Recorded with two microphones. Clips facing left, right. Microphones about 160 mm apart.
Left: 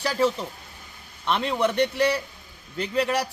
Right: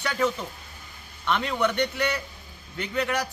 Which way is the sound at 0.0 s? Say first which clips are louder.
Left 3 dB; 30° left (ahead or behind).